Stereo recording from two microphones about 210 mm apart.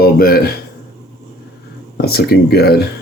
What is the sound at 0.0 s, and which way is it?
Speech, 45° left (ahead or behind).